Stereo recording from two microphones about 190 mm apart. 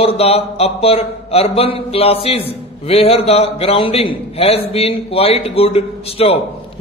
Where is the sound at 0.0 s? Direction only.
30° left (ahead or behind).